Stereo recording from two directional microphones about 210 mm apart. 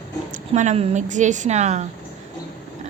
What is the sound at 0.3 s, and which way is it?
A woman's voice, 35° right (ahead or behind).